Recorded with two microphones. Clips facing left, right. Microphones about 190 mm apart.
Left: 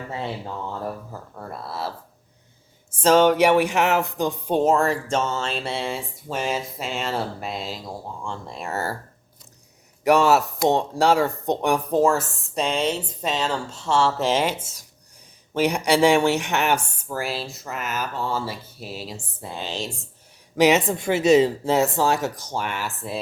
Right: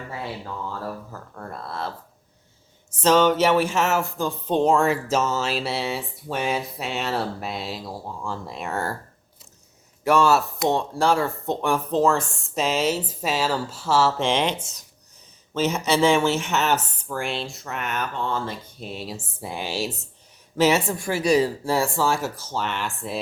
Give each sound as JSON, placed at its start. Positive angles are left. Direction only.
{"t": 0.7, "sound": "speech", "side_deg": 20}
{"t": 1.4, "sound": "speech", "side_deg": 5}
{"t": 2.9, "sound": "speech", "side_deg": 10}
{"t": 10.0, "sound": "speech", "side_deg": 20}
{"t": 19.4, "sound": "speech", "side_deg": -10}
{"t": 20.6, "sound": "speech", "side_deg": 20}